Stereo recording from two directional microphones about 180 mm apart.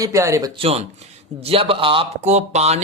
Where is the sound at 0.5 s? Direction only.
35° right (ahead or behind).